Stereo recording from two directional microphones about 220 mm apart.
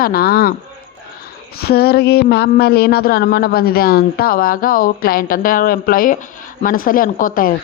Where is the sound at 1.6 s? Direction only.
45° left (ahead or behind).